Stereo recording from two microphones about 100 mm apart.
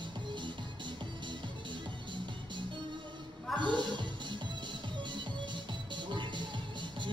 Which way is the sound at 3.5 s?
50° right (ahead or behind).